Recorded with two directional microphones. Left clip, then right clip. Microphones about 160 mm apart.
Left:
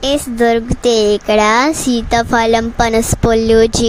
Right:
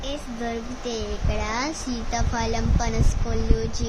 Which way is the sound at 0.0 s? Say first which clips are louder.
Left 18 dB; 90° left.